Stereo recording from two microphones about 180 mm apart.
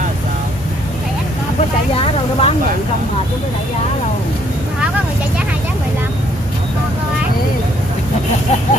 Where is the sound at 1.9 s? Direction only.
35° left (ahead or behind).